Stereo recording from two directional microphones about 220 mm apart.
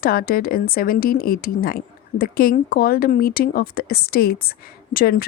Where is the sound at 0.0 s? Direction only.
40° left (ahead or behind).